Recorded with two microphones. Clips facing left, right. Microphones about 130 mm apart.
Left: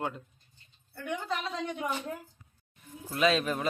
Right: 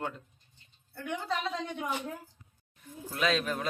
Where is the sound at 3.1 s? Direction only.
Centre (ahead or behind).